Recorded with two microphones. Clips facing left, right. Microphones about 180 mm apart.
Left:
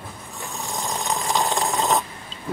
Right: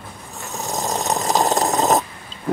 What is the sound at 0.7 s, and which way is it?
Dog, 40° right (ahead or behind).